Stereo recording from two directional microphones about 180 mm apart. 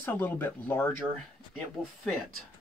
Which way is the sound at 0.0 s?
10° left (ahead or behind).